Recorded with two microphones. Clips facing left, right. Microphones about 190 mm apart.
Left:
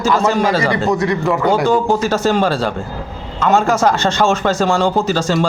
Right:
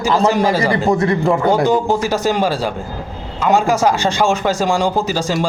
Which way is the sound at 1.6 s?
15° right (ahead or behind).